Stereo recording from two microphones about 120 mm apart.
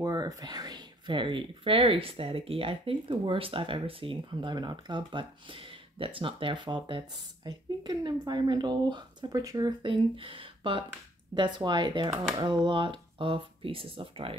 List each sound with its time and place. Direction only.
0.0 s speech: 35° right (ahead or behind); by 14.3 s 50° right (ahead or behind)